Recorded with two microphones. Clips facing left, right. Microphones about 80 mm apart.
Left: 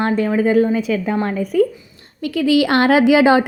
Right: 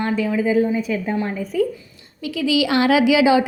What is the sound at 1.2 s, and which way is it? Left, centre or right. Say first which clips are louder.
Speech: left 5 dB; left.